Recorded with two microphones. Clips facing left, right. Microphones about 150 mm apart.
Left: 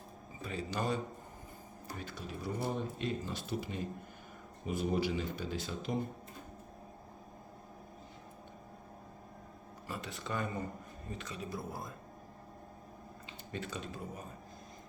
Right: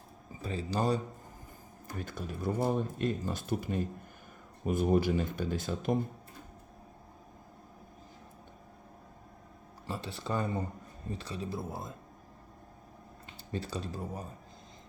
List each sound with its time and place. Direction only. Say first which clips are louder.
0.4 s speech: right 5 dB; 35° right (ahead or behind)
2.0 s speech: right 5 dB; 50° right (ahead or behind)
9.8 s speech: right 4 dB; 30° right (ahead or behind)
13.5 s speech: right 4 dB; 35° right (ahead or behind)